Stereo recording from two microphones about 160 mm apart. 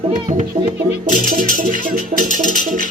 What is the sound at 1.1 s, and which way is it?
Music, 55° right (ahead or behind).